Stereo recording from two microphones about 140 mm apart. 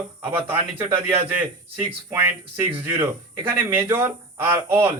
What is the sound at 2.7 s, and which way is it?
A man's voice, 15° right (ahead or behind).